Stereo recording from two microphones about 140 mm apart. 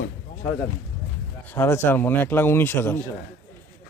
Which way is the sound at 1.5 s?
20° left (ahead or behind).